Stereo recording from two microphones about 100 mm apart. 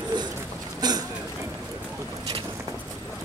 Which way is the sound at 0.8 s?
45° right (ahead or behind).